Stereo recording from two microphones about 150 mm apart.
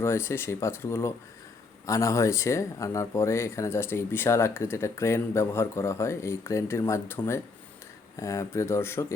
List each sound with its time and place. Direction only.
0.0 s speech: 15° left (ahead or behind)